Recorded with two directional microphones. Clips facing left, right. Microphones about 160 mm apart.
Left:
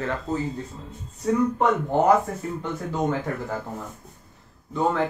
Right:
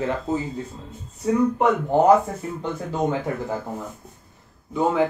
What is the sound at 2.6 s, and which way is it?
Speech, 15° right (ahead or behind).